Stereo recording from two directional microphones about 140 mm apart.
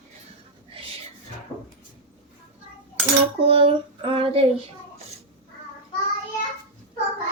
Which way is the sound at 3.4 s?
40° right (ahead or behind).